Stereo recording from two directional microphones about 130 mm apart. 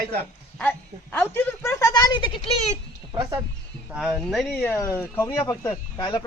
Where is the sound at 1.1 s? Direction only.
15° left (ahead or behind); by 2.7 s 50° left (ahead or behind).